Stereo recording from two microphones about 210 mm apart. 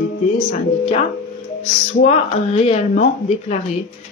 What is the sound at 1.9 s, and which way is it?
A woman's voice, 40° left (ahead or behind).